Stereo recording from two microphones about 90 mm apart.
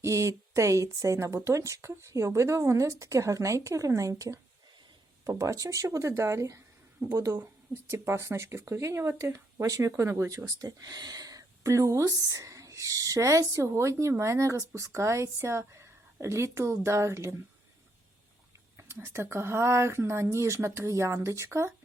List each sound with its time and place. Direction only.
0.0 s speech: 35° right (ahead or behind)
18.8 s speech: 25° right (ahead or behind)